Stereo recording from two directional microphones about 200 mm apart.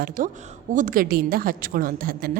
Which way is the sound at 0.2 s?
40° right (ahead or behind).